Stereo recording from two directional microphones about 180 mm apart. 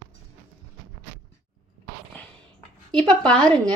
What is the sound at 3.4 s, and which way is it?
Speech, 25° right (ahead or behind).